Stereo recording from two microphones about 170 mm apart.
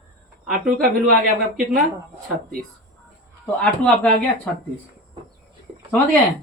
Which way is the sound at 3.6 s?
5° left (ahead or behind).